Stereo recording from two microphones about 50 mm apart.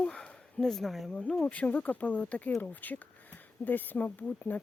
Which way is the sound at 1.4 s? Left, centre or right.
Left.